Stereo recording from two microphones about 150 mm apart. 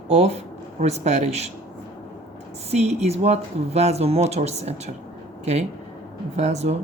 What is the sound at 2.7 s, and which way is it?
Speech, 45° right (ahead or behind).